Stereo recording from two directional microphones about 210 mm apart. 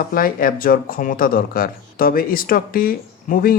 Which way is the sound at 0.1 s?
45° left (ahead or behind).